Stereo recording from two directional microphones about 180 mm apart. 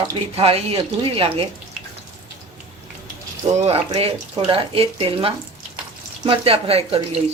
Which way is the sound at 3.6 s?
35° right (ahead or behind).